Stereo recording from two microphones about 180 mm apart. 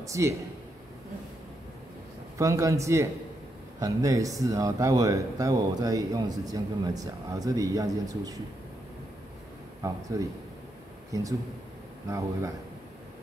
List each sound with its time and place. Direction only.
0.0 s a man's voice: 15° right (ahead or behind)
2.3 s a man's voice: 15° right (ahead or behind)
9.8 s a man's voice: 20° right (ahead or behind)